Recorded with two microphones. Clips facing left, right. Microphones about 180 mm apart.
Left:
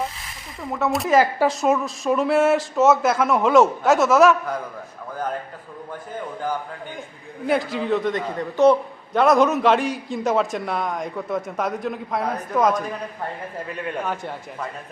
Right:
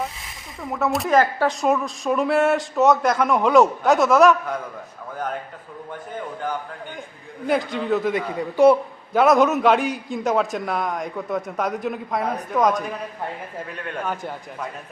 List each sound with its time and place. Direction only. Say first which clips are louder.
0.6 s a man's voice: even; centre (ahead or behind)
7.4 s a man's voice: even; centre (ahead or behind)